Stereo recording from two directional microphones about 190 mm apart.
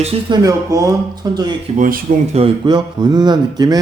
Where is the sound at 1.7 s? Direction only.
45° right (ahead or behind).